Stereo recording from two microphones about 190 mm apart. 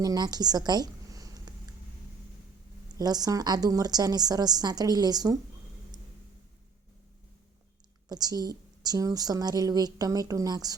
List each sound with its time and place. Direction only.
0.0 s a woman's voice: 20° right (ahead or behind)
3.0 s a woman's voice: 20° right (ahead or behind)
8.1 s a woman's voice: 20° right (ahead or behind)